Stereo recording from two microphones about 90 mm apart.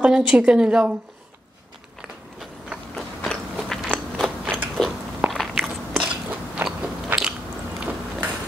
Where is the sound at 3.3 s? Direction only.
10° left (ahead or behind).